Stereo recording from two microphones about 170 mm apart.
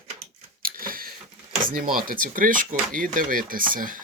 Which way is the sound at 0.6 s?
55° right (ahead or behind).